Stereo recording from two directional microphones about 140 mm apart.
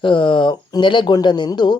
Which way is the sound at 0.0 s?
35° left (ahead or behind).